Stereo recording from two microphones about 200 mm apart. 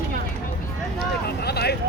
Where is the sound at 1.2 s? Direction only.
55° left (ahead or behind).